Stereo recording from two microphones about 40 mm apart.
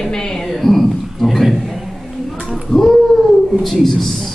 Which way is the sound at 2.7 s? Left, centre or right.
Centre.